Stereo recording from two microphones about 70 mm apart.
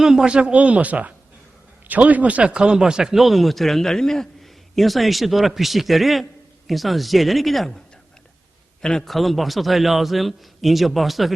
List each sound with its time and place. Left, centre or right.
0.0 s a man's voice: centre
8.8 s a man's voice: centre